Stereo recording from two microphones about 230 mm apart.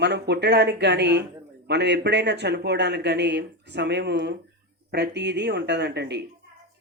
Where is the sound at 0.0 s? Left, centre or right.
Right.